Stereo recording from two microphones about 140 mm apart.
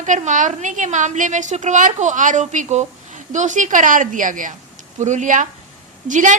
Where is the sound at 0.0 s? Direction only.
60° right (ahead or behind).